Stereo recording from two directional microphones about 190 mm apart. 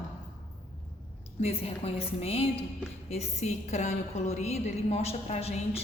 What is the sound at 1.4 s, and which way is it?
A woman's voice, 30° left (ahead or behind).